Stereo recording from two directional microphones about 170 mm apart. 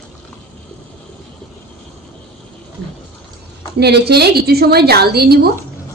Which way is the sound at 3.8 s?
75° right (ahead or behind).